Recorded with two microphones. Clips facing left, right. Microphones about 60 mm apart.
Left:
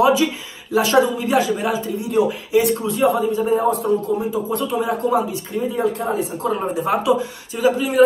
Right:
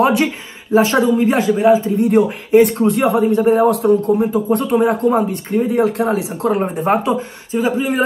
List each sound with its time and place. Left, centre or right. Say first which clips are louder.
0.0 s a man's voice: right 1 dB; right
0.7 s a man's voice: right 3 dB; right
2.0 s a man's voice: right 5 dB; right
4.5 s a man's voice: right 8 dB; right
6.5 s a man's voice: right 5 dB; right
7.5 s a man's voice: right 1 dB; right